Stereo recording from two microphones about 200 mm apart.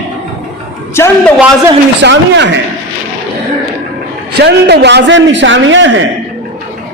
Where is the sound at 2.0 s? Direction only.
60° right (ahead or behind).